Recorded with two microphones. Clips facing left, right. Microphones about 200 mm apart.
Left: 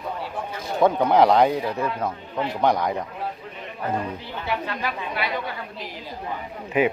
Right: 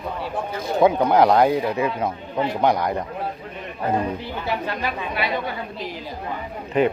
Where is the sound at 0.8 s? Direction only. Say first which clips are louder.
Right 1 dB; centre (ahead or behind).